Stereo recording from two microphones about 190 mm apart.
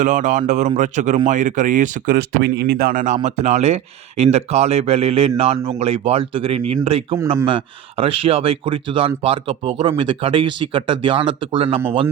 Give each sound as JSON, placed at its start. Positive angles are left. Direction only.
{"t": 0.0, "sound": "speech", "side_deg": -40}